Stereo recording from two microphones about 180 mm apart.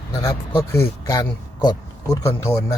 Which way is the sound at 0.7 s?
15° left (ahead or behind).